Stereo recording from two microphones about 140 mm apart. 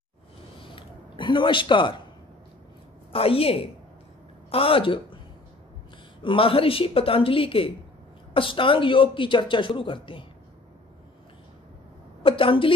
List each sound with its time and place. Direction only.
0.6 s a sound: 35° left (ahead or behind)
3.1 s a woman's voice: 40° left (ahead or behind)
6.2 s speech: 40° left (ahead or behind)
12.2 s speech: 40° left (ahead or behind)